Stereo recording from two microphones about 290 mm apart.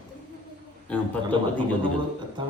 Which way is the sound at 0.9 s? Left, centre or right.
Centre.